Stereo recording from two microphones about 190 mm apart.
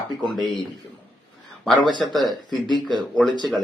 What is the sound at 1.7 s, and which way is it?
Speech, 25° left (ahead or behind).